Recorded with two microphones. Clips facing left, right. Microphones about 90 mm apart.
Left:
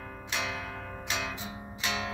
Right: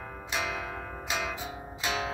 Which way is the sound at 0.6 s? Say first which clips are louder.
Right 2 dB; 20° right (ahead or behind).